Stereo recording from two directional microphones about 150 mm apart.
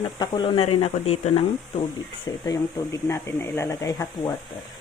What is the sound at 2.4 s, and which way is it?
Speech, 25° left (ahead or behind).